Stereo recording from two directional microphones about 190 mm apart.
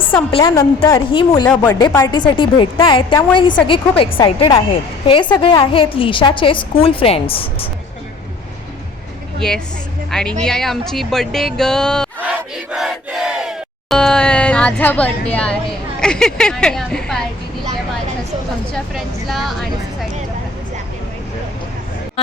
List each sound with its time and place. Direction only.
0.3 s a woman's voice: 25° left (ahead or behind)
1.5 s a woman's voice: 10° left (ahead or behind); by 7.7 s 30° left (ahead or behind)
9.4 s a woman's voice: 5° left (ahead or behind)
12.7 s crowd: centre (ahead or behind)
18.7 s speech: centre (ahead or behind)